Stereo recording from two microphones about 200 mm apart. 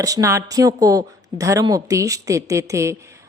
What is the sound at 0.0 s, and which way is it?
A woman's voice, 15° right (ahead or behind).